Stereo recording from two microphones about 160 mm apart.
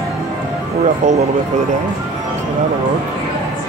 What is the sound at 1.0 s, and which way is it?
Speech, 45° right (ahead or behind).